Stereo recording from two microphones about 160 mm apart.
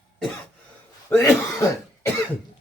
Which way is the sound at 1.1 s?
20° left (ahead or behind).